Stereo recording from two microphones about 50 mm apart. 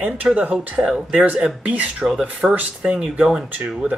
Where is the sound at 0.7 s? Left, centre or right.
Centre.